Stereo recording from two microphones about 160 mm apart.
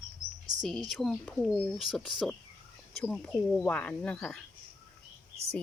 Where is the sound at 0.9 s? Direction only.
5° left (ahead or behind).